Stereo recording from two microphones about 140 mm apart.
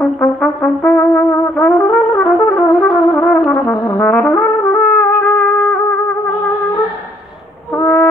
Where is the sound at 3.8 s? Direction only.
10° left (ahead or behind).